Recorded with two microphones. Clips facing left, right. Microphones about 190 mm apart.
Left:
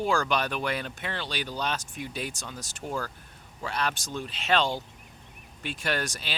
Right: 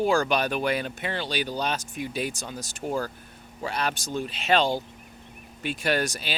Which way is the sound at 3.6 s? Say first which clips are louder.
Right 2 dB; 10° right (ahead or behind).